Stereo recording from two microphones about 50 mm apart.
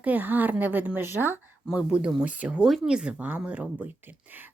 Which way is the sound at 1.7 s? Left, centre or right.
Right.